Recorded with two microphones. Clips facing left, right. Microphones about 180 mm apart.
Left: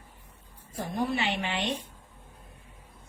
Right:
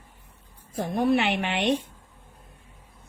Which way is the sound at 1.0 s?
60° right (ahead or behind).